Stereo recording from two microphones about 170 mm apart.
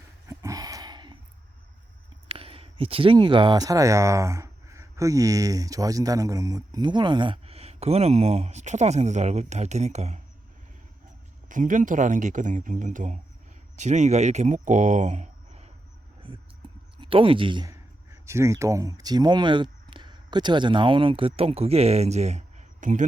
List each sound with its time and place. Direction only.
0.3 s a sound: 20° right (ahead or behind)
2.2 s speech: 35° right (ahead or behind)
11.4 s speech: 50° right (ahead or behind)
17.0 s speech: 30° right (ahead or behind); by 23.0 s 45° right (ahead or behind)